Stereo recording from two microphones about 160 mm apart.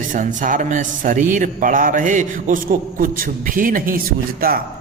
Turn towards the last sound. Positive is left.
turn(degrees=-65)  # may be behind; listen again after turning